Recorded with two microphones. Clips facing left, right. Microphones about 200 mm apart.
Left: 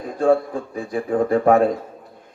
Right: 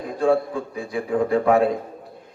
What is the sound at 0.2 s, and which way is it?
A man's voice, 45° left (ahead or behind).